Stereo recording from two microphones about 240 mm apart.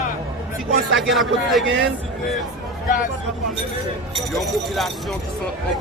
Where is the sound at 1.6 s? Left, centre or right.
Right.